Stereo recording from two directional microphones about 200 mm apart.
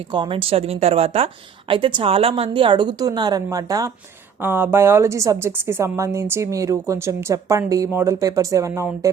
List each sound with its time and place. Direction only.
0.1 s a woman's voice: 25° right (ahead or behind)